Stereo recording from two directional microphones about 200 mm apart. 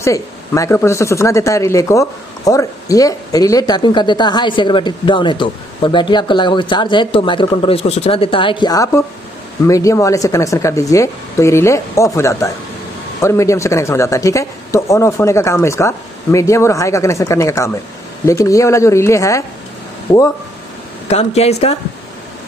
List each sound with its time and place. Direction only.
0.0 s speech: 15° left (ahead or behind)
21.1 s speech: 30° left (ahead or behind)